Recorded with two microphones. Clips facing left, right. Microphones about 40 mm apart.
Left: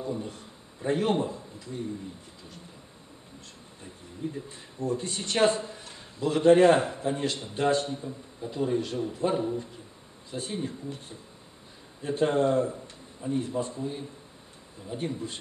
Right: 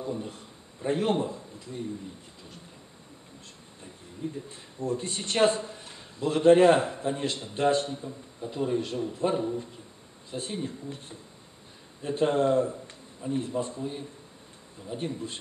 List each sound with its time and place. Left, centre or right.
0.0 s a man's voice: centre
4.2 s speech: centre
5.0 s a man's voice: centre
5.3 s a man's voice: centre
12.0 s speech: centre